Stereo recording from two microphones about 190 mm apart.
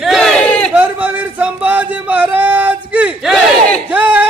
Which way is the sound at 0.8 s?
10° right (ahead or behind).